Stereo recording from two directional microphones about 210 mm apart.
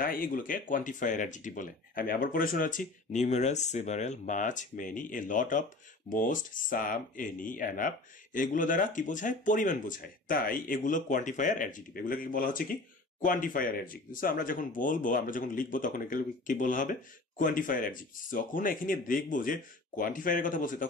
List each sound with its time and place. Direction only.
0.0 s speech: 40° left (ahead or behind)